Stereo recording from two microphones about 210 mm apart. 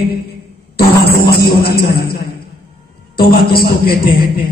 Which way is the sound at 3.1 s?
45° left (ahead or behind).